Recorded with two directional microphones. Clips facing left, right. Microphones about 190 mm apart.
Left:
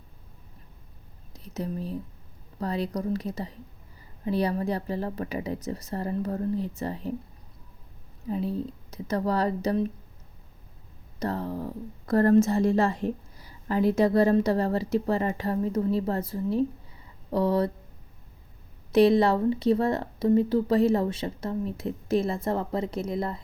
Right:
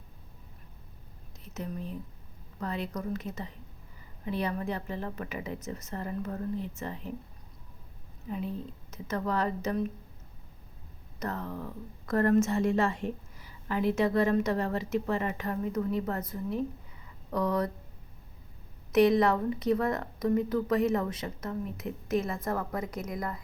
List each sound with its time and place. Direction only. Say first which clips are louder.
1.3 s whispering: left 5 dB; 35° left (ahead or behind)
2.6 s speech: left 5 dB; 35° left (ahead or behind)
8.3 s speech: left 6 dB; 35° left (ahead or behind)
11.2 s speech: left 6 dB; 30° left (ahead or behind)
18.9 s speech: left 3 dB; 30° left (ahead or behind)